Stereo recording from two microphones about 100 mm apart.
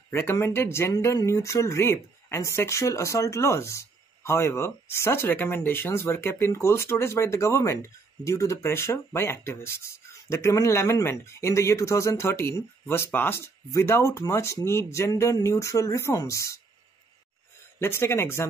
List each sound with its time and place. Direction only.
0.1 s speech: 25° left (ahead or behind)
17.7 s speech: 25° left (ahead or behind)